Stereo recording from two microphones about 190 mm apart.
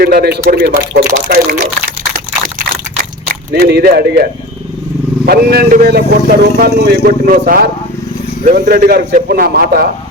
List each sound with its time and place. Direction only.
0.0 s speech: 55° right (ahead or behind)
3.5 s speech: 55° right (ahead or behind)